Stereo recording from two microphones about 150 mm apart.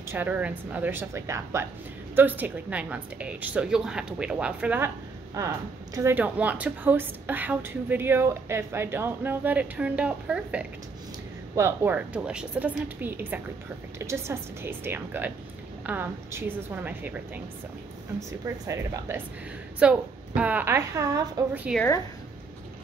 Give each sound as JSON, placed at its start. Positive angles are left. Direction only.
{"t": 0.1, "sound": "a woman's voice", "side_deg": -10}
{"t": 18.4, "sound": "a woman's voice", "side_deg": -20}
{"t": 21.7, "sound": "a woman's voice", "side_deg": -5}